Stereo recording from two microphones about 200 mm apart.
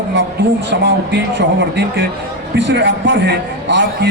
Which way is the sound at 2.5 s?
60° right (ahead or behind).